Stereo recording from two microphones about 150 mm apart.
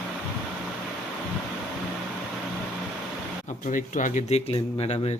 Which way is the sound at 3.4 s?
55° left (ahead or behind).